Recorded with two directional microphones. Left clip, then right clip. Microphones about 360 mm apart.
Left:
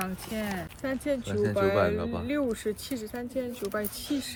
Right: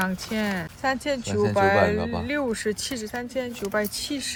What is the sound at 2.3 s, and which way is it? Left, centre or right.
Speech, right.